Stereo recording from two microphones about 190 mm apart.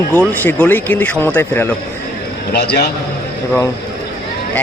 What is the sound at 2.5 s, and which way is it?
Speech, 60° left (ahead or behind).